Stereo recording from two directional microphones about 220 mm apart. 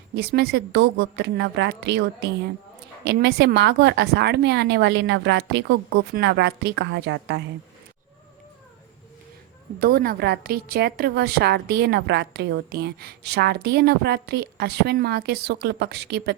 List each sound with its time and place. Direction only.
0.2 s a woman's voice: 45° right (ahead or behind)
9.8 s a woman's voice: 40° right (ahead or behind)